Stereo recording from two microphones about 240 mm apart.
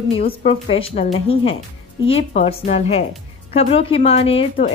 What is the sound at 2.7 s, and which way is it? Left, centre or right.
Speech, left.